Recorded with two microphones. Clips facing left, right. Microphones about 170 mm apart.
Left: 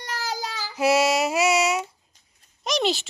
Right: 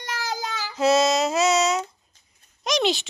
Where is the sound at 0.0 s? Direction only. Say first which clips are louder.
Right 1 dB; 40° left (ahead or behind).